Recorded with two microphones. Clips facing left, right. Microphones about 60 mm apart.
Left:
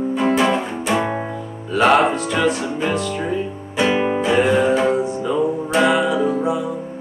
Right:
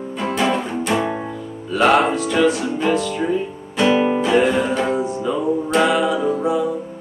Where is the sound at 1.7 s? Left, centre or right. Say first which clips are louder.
Left 1 dB; centre.